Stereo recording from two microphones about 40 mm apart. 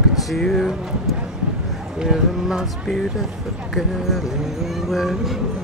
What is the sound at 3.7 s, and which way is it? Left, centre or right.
Speech, centre.